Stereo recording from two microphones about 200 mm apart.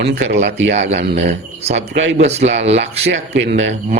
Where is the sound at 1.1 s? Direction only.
35° right (ahead or behind).